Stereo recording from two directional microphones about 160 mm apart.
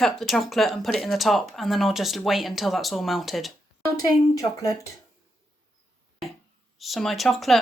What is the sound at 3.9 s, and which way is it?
Speech, 20° left (ahead or behind).